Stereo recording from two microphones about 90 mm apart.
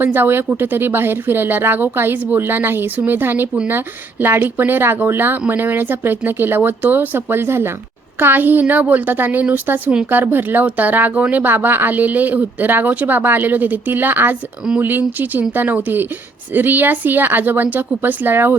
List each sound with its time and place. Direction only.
0.0 s a woman's voice: 20° right (ahead or behind)